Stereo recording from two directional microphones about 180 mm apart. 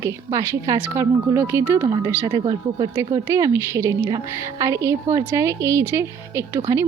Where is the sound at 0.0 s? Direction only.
15° right (ahead or behind).